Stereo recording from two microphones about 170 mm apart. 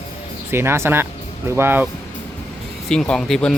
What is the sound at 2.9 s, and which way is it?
Speech, 5° left (ahead or behind).